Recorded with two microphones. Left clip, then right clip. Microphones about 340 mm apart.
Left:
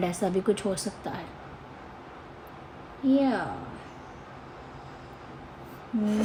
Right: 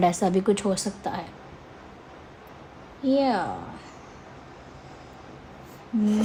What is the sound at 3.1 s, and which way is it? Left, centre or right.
Speech, right.